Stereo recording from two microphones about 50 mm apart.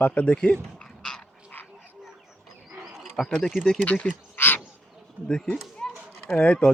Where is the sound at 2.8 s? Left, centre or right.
Centre.